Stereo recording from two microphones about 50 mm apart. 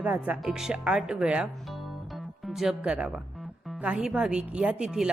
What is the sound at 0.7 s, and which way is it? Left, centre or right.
Speech, right.